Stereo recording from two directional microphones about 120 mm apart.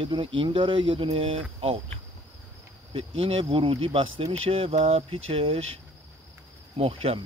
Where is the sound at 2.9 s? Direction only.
50° right (ahead or behind).